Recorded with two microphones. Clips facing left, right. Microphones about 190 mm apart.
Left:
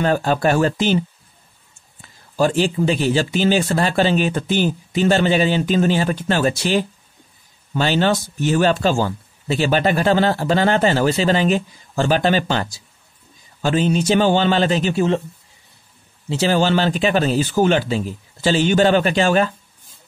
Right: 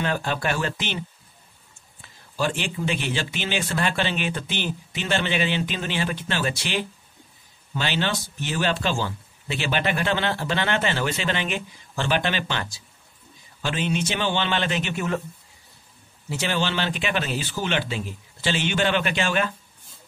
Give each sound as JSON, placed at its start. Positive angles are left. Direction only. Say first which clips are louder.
{"t": 0.0, "sound": "speech", "louder": "left 8 dB", "side_deg": 40}
{"t": 2.3, "sound": "speech", "louder": "left 9 dB", "side_deg": 40}
{"t": 16.3, "sound": "speech", "louder": "left 9 dB", "side_deg": 35}